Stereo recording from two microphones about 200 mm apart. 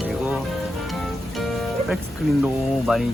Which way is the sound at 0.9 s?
Centre (ahead or behind).